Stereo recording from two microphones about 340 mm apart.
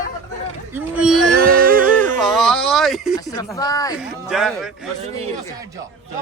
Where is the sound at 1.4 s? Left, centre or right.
Right.